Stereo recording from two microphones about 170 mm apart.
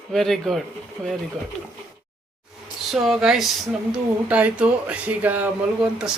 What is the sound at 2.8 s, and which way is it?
Speech, centre (ahead or behind).